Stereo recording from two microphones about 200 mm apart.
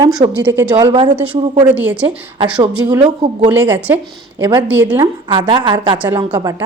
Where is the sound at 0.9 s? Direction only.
25° right (ahead or behind).